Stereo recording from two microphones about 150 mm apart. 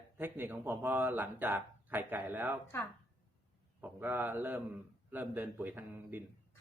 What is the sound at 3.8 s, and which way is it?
Speech, 10° right (ahead or behind).